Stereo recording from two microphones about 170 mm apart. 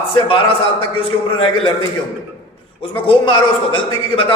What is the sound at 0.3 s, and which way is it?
A man's voice, 30° left (ahead or behind).